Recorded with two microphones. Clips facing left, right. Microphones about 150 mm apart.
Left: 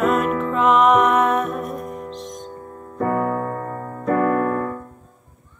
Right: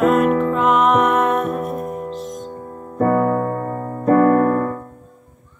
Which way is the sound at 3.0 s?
40° right (ahead or behind).